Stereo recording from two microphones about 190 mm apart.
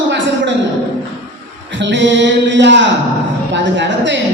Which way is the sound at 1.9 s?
70° right (ahead or behind).